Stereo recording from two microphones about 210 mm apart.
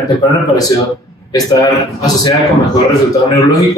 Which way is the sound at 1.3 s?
15° left (ahead or behind).